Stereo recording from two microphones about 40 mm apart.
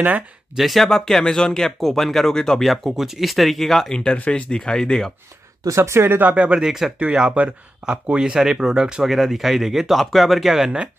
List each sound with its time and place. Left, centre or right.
0.6 s speech: centre
0.8 s speech: centre
2.6 s speech: centre
3.9 s speech: left
5.8 s speech: right
6.2 s speech: right
6.6 s speech: centre
7.2 s speech: right
9.0 s speech: centre